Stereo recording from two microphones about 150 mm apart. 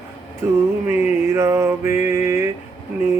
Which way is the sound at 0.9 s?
20° right (ahead or behind).